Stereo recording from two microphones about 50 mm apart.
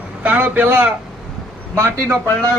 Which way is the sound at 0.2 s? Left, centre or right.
Right.